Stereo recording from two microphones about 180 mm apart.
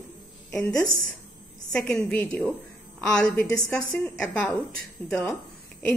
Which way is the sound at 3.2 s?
20° left (ahead or behind).